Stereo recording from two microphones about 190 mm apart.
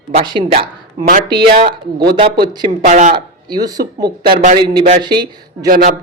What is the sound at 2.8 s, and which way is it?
Speech, 40° right (ahead or behind).